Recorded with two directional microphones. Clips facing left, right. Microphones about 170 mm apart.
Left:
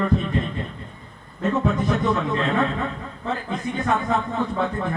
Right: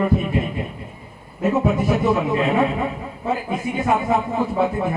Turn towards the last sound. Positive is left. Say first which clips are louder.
# right 4 dB
turn(degrees=-10)  # may be behind; listen again after turning